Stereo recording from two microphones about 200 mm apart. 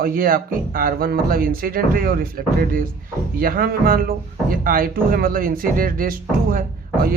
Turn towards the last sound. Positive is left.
turn(degrees=-45)  # may be behind; listen again after turning